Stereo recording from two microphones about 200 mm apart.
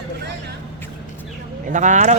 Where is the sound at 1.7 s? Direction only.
40° right (ahead or behind).